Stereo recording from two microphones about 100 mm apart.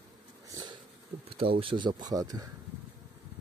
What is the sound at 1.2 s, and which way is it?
Speech, 70° right (ahead or behind).